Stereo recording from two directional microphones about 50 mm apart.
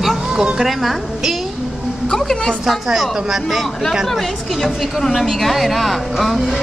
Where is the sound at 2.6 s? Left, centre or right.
Centre.